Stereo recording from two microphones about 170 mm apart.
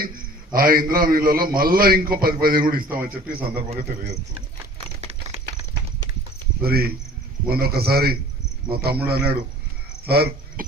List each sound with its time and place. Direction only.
0.0 s a man's voice: 55° right (ahead or behind)
2.9 s a man's voice: 10° right (ahead or behind)
4.9 s a sound: 35° right (ahead or behind)
6.6 s a man's voice: 65° right (ahead or behind)